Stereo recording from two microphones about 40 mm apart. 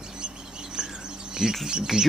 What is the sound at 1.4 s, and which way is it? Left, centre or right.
Speech, centre.